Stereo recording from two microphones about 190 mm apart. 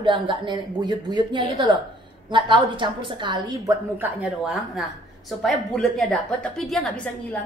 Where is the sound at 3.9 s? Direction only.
10° right (ahead or behind); by 7.4 s 5° left (ahead or behind).